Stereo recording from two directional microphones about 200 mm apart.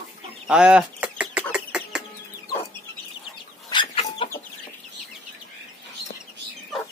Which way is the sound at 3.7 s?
25° left (ahead or behind).